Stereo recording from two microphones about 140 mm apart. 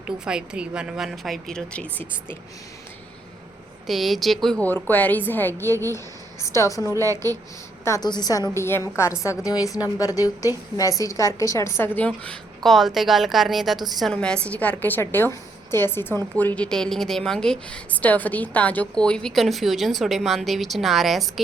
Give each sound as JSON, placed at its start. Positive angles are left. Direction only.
{"t": 0.3, "sound": "a woman's voice", "side_deg": -5}
{"t": 3.8, "sound": "a woman's voice", "side_deg": 0}
{"t": 6.9, "sound": "a woman's voice", "side_deg": -25}
{"t": 7.9, "sound": "a woman's voice", "side_deg": 25}